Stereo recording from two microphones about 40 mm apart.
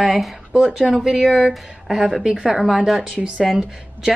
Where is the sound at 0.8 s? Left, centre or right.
Centre.